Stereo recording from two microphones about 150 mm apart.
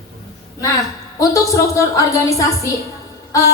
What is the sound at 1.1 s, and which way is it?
A woman's voice, 25° left (ahead or behind).